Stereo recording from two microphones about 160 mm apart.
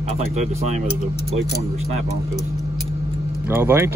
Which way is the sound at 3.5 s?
15° right (ahead or behind).